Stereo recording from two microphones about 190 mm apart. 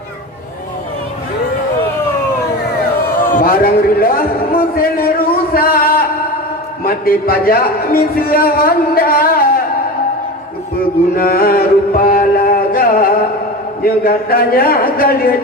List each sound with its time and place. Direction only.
3.3 s a man's voice: 50° left (ahead or behind)
11.2 s music: 50° left (ahead or behind)
13.8 s speech: 50° left (ahead or behind)